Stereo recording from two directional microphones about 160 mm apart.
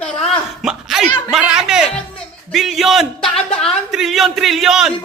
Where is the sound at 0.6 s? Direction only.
Centre (ahead or behind).